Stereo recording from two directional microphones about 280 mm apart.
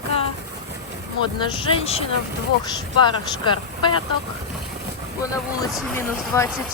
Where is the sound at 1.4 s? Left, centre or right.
Centre.